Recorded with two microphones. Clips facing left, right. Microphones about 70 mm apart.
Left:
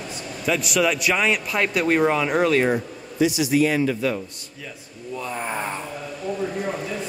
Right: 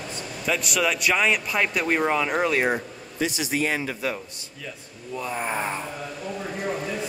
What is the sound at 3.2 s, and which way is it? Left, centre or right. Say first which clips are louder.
Speech: left 6 dB; right.